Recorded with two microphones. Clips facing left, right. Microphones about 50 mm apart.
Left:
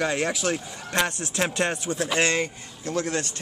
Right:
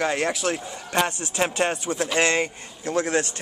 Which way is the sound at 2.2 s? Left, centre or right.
Centre.